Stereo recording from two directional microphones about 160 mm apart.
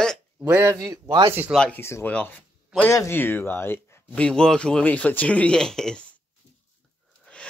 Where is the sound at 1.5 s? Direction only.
5° left (ahead or behind).